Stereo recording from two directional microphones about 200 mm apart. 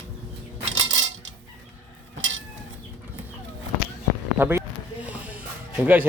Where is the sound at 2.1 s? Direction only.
70° right (ahead or behind).